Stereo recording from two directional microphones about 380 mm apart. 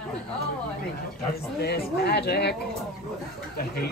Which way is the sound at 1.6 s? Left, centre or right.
Left.